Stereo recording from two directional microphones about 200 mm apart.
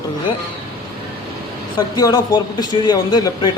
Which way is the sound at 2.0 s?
20° left (ahead or behind).